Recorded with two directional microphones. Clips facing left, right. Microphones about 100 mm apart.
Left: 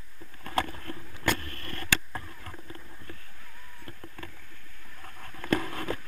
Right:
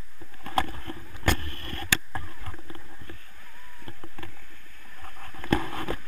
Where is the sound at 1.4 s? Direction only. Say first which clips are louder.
Right 2 dB; 30° right (ahead or behind).